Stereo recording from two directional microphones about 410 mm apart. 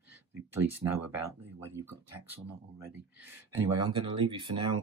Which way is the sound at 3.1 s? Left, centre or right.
Centre.